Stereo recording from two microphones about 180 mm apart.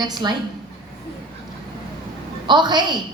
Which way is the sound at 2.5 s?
25° right (ahead or behind).